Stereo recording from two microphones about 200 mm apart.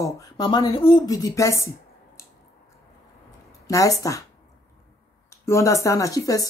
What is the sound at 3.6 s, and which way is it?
Speech, 15° left (ahead or behind).